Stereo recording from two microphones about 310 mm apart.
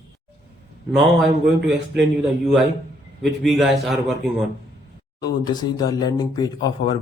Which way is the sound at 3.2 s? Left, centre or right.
Centre.